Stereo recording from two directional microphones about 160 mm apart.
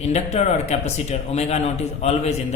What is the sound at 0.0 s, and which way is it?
A man's voice, 40° left (ahead or behind).